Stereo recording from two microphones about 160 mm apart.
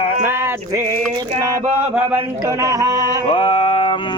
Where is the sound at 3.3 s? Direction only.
35° left (ahead or behind).